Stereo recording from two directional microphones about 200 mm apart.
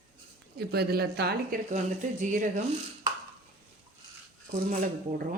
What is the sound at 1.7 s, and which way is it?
Speech, 40° right (ahead or behind).